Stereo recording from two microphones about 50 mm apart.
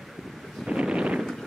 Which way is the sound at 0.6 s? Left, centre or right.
Centre.